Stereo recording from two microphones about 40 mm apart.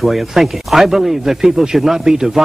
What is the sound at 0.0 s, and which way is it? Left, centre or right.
A man's voice, centre.